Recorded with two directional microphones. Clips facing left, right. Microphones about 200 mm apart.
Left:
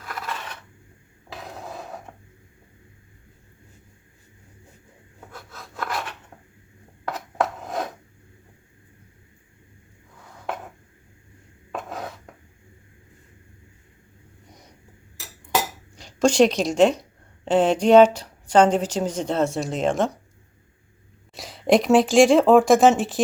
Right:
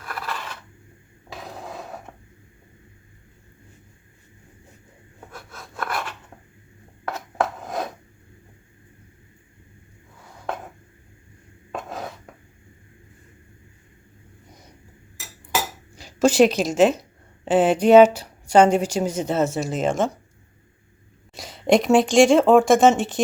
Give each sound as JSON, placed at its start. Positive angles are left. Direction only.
{"t": 0.0, "sound": "coin", "side_deg": 20}
{"t": 5.3, "sound": "a sound", "side_deg": 20}
{"t": 11.7, "sound": "a sound", "side_deg": 0}
{"t": 14.4, "sound": "vehicle", "side_deg": 0}
{"t": 16.0, "sound": "a woman's voice", "side_deg": -5}
{"t": 21.3, "sound": "speech", "side_deg": 0}